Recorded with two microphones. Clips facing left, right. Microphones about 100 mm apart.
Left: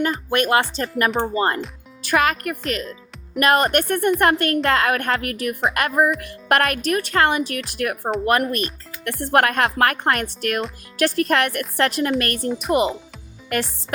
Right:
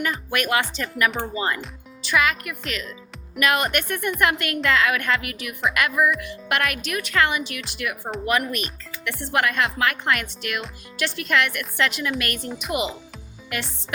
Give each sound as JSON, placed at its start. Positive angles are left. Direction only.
{"t": 0.0, "sound": "a woman's voice", "side_deg": 35}